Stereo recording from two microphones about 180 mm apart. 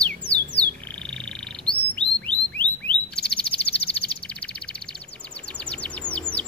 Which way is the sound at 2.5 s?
5° left (ahead or behind).